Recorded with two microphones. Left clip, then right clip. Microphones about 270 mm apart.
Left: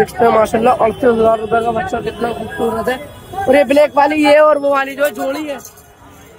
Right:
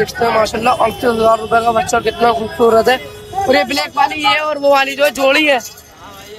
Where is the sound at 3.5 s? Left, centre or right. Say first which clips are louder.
Left 5 dB; centre.